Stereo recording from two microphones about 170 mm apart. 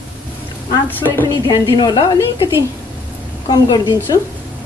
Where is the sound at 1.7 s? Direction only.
25° left (ahead or behind).